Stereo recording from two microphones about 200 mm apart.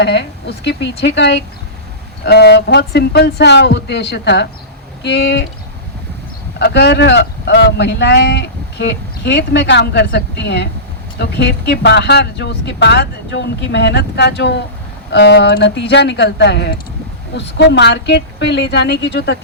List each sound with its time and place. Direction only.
0.0 s speech: 60° left (ahead or behind)
6.6 s speech: 60° left (ahead or behind)